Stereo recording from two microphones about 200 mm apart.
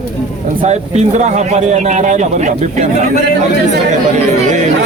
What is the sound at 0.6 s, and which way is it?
Speech, 35° right (ahead or behind).